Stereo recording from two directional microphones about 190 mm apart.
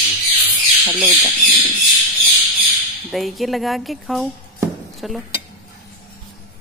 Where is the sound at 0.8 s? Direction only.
Centre (ahead or behind).